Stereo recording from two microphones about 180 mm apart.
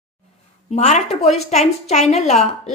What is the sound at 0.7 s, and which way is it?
A woman's voice, 40° left (ahead or behind).